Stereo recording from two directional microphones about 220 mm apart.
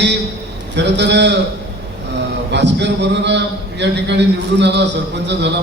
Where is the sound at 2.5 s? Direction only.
50° right (ahead or behind).